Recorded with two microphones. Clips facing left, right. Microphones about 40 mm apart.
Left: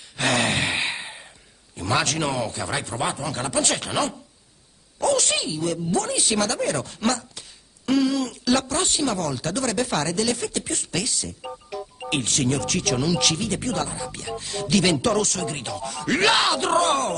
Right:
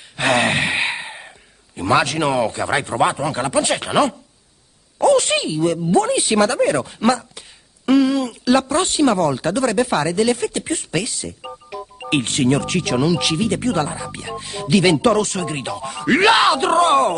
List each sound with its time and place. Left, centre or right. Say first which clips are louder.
0.2 s sigh: right 5 dB; right
1.8 s speech: right 6 dB; right
5.0 s speech: right 7 dB; right
8.7 s speech: right 8 dB; right
13.5 s speech: right 6 dB; right